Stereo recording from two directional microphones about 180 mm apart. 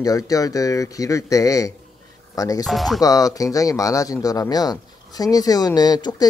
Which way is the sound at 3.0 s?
20° left (ahead or behind).